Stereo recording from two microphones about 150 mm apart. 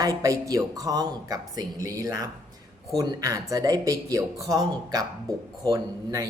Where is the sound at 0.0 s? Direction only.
25° right (ahead or behind).